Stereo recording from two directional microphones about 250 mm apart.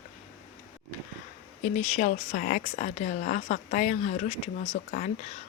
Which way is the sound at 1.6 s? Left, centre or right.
Left.